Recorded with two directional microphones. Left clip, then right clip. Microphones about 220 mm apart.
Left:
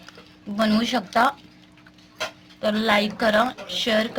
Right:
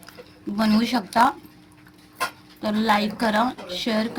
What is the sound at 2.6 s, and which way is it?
A woman's voice, 35° left (ahead or behind).